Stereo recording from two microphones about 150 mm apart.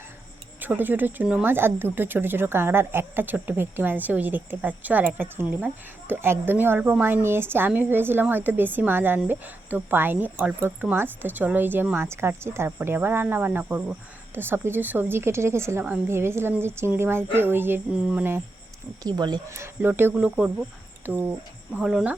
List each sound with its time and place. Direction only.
0.6 s speech: 10° right (ahead or behind)
19.0 s speech: 25° right (ahead or behind); by 22.1 s 5° right (ahead or behind)